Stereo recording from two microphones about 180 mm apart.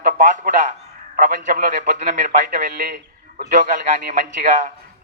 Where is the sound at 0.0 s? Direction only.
45° right (ahead or behind).